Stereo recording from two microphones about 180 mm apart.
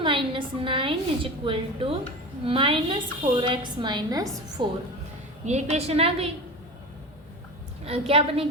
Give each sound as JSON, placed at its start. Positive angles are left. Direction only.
{"t": 0.0, "sound": "a woman's voice", "side_deg": -30}
{"t": 5.5, "sound": "a woman's voice", "side_deg": -35}
{"t": 7.9, "sound": "a woman's voice", "side_deg": -30}